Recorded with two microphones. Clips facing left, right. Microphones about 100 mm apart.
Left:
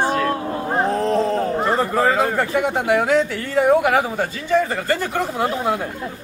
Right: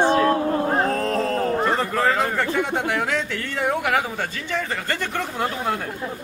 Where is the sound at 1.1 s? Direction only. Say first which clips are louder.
Left 3 dB; centre (ahead or behind).